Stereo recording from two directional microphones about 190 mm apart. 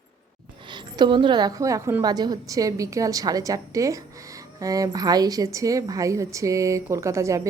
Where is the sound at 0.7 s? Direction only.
25° right (ahead or behind).